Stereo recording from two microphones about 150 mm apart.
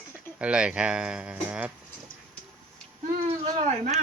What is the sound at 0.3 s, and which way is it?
Speech, 5° right (ahead or behind).